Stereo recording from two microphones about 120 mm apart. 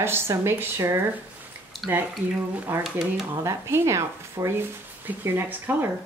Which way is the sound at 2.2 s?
15° right (ahead or behind).